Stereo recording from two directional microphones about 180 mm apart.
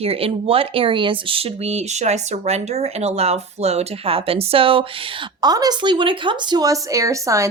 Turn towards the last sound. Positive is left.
turn(degrees=-15)  # may be behind; listen again after turning